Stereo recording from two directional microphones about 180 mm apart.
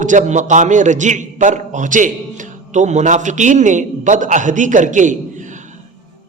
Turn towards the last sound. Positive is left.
turn(degrees=-45)  # may be behind; listen again after turning